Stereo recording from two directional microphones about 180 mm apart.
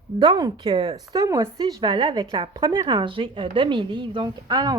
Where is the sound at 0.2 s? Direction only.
20° right (ahead or behind).